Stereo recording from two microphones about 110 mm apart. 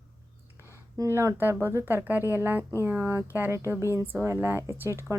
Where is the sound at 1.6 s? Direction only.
20° right (ahead or behind).